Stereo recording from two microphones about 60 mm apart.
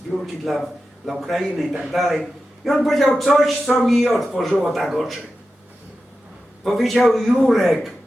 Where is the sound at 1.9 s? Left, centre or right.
Centre.